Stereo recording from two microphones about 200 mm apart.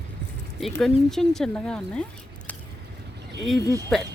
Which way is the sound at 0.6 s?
Centre (ahead or behind).